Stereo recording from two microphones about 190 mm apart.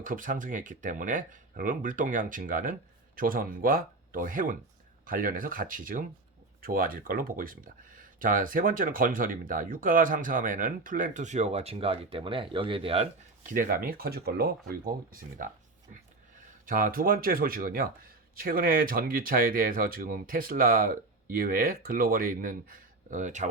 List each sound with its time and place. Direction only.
0.0 s speech: 45° right (ahead or behind); by 13.1 s 30° right (ahead or behind)
13.5 s speech: 50° right (ahead or behind)
16.6 s speech: 45° right (ahead or behind)